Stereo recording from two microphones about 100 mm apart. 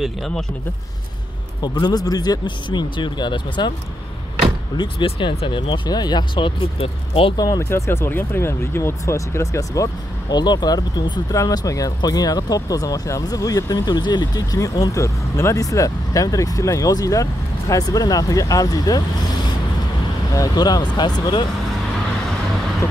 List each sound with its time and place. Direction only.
0.0 s speech: centre (ahead or behind)
1.6 s speech: 40° left (ahead or behind)
4.7 s speech: 60° left (ahead or behind)
7.3 s speech: 35° left (ahead or behind)
10.3 s speech: 45° left (ahead or behind)
20.3 s speech: 40° left (ahead or behind)